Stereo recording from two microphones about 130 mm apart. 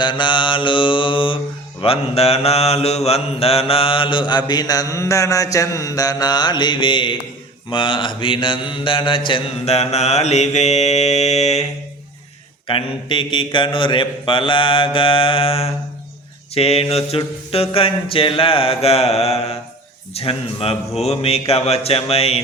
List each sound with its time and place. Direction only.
0.0 s mantra: 35° left (ahead or behind); by 11.6 s 60° left (ahead or behind)
12.6 s mantra: 40° left (ahead or behind)